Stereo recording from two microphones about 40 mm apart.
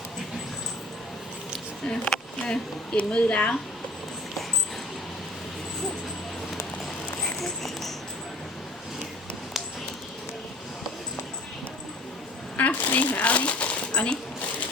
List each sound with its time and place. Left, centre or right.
1.9 s speech: centre
2.4 s speech: left
7.2 s a sound: centre
12.5 s shuffling cards: left